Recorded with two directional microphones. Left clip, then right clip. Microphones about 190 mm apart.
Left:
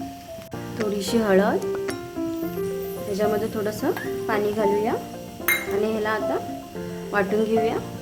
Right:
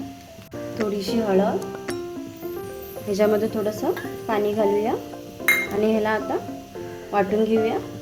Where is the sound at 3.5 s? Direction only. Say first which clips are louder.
Right 1 dB; centre (ahead or behind).